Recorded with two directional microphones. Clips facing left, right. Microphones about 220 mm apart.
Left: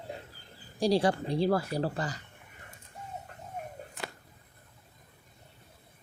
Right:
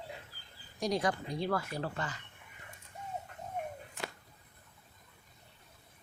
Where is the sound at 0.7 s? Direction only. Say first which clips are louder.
Left 6 dB; 30° left (ahead or behind).